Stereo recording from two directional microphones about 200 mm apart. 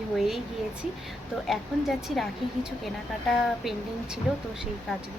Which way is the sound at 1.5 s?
Centre (ahead or behind).